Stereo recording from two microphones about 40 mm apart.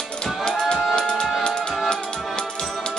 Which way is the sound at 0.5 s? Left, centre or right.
Centre.